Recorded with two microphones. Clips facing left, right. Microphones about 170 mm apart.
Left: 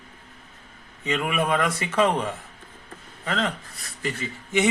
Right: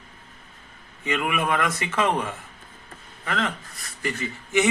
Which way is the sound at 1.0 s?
30° left (ahead or behind).